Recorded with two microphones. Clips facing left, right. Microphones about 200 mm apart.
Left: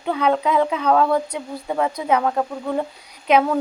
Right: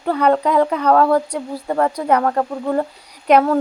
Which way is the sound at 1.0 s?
10° right (ahead or behind).